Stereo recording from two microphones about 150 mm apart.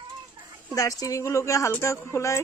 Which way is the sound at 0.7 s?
20° left (ahead or behind).